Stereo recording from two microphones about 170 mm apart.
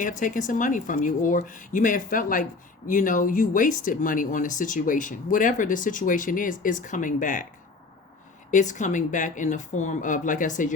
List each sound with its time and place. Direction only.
0.0 s speech: 50° left (ahead or behind)
8.4 s speech: 45° left (ahead or behind)